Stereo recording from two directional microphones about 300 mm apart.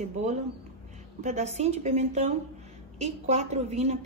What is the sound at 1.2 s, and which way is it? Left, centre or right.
A woman's voice, right.